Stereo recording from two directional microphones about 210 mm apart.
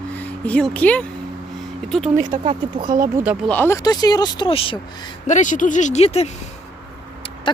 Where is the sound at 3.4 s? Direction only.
10° left (ahead or behind); by 4.8 s 25° left (ahead or behind).